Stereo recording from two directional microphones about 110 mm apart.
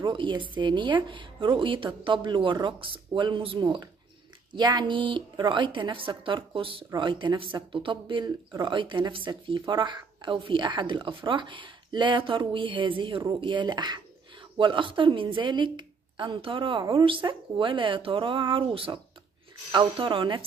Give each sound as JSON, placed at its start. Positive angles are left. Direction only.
{"t": 0.0, "sound": "a woman's voice", "side_deg": -45}